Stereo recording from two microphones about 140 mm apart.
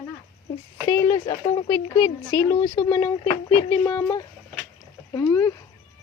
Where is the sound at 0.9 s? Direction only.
25° left (ahead or behind).